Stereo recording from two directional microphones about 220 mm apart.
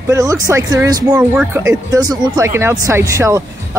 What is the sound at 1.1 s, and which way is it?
Speech, 5° right (ahead or behind).